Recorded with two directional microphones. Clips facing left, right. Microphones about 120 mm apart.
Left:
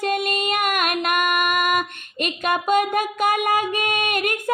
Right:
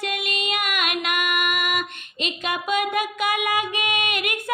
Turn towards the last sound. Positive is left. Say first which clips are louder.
# left 3 dB
turn(degrees=45)  # may be behind; listen again after turning